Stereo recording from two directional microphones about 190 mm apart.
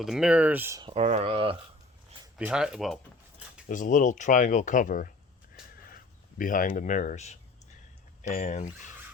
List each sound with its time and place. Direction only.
0.0 s speech: centre (ahead or behind)
0.8 s speech: 30° right (ahead or behind)
2.4 s speech: 5° right (ahead or behind)
3.7 s speech: 40° left (ahead or behind)
6.3 s speech: 45° left (ahead or behind)